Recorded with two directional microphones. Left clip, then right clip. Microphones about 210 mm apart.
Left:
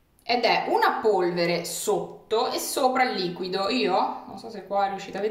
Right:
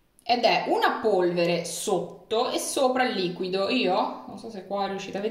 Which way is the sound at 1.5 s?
35° left (ahead or behind).